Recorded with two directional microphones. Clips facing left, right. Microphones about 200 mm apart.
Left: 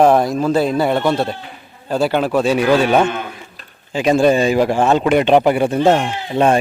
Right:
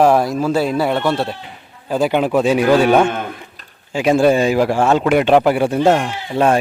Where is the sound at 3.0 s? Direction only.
50° right (ahead or behind).